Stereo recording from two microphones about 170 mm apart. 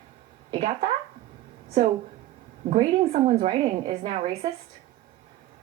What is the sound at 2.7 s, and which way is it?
A woman's voice, 40° right (ahead or behind).